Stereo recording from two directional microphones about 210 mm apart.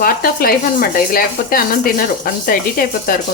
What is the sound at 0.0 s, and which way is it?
Speech, 45° left (ahead or behind).